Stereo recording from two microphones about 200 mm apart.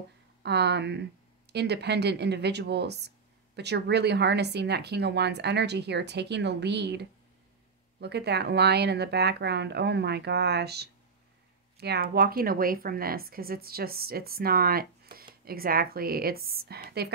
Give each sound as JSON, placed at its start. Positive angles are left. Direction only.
{"t": 0.4, "sound": "a woman's voice", "side_deg": -55}